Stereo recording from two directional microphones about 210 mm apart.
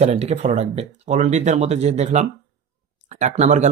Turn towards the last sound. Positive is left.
turn(degrees=-35)  # may be behind; listen again after turning